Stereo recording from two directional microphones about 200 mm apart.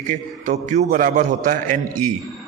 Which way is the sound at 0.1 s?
40° right (ahead or behind).